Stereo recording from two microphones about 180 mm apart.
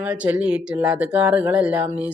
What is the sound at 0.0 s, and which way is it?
Speech, 10° right (ahead or behind).